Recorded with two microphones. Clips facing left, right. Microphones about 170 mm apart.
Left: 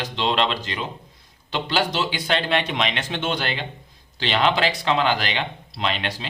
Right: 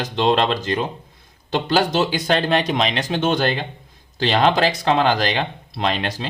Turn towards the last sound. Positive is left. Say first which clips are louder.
# right 4 dB
turn(degrees=-40)  # may be behind; listen again after turning